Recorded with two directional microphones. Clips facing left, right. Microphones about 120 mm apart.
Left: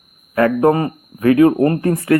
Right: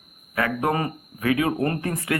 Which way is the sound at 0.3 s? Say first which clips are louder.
Left 10 dB; 35° left (ahead or behind).